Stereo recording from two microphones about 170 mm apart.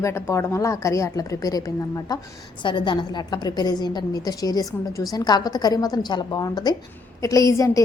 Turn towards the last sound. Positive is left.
turn(degrees=20)  # may be behind; listen again after turning